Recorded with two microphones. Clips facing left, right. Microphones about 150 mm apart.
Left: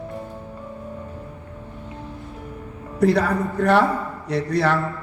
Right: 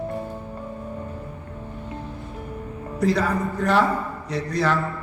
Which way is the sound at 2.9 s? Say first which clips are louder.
Left 3 dB; 60° left (ahead or behind).